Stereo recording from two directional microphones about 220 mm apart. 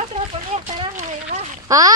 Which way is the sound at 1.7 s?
15° right (ahead or behind).